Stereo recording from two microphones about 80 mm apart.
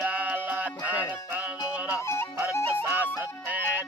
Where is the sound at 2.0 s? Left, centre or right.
Left.